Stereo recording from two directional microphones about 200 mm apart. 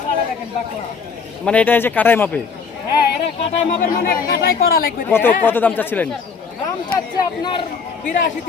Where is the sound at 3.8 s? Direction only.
45° left (ahead or behind).